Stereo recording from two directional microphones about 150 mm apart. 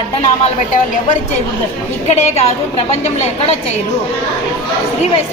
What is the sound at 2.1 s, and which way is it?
Speech, 50° left (ahead or behind).